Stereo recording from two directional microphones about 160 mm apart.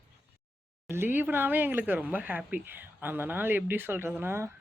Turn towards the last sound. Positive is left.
turn(degrees=-15)  # may be behind; listen again after turning